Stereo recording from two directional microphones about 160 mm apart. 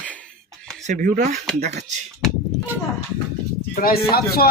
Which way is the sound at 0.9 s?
60° right (ahead or behind).